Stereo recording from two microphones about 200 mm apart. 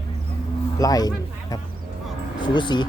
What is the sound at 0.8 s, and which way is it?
Speech, 20° left (ahead or behind).